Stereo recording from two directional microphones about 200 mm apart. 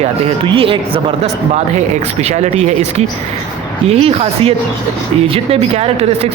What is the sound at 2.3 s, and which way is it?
Speech, 35° right (ahead or behind).